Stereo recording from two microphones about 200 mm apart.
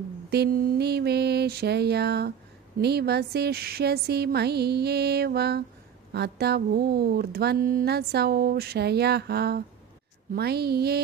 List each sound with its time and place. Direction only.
0.3 s mantra: 55° right (ahead or behind)
2.8 s speech: 55° right (ahead or behind)